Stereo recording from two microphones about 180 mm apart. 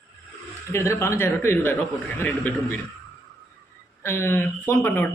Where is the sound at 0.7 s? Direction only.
15° left (ahead or behind).